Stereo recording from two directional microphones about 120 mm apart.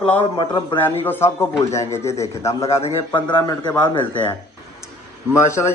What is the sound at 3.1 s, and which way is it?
A man's voice, 40° left (ahead or behind).